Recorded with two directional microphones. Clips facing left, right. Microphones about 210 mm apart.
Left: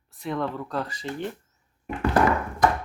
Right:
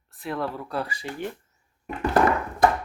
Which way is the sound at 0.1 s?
Centre (ahead or behind).